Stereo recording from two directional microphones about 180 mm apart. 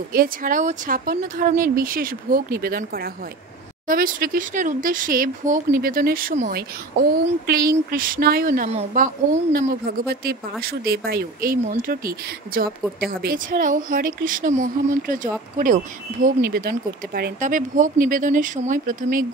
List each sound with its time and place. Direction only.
0.1 s speech: 50° right (ahead or behind)
8.6 s a woman's voice: 40° right (ahead or behind)